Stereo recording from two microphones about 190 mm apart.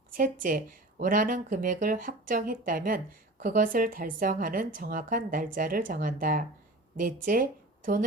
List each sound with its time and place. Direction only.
0.1 s speech: 45° right (ahead or behind)